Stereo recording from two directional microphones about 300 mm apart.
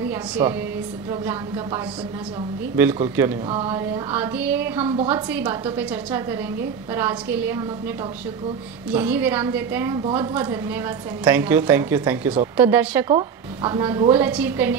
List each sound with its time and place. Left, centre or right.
0.4 s a woman's voice: centre
2.7 s a woman's voice: centre
4.8 s a woman's voice: centre
5.1 s a woman's voice: centre
8.9 s a woman's voice: centre